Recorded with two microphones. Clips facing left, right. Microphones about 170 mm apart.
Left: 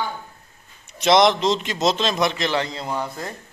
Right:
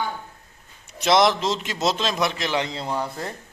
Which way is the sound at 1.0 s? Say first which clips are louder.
Left 2 dB; 5° right (ahead or behind).